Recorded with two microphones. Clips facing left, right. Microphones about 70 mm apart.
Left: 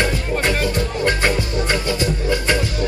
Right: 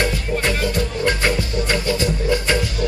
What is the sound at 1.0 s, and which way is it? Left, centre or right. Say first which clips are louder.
Music: left 1 dB; left.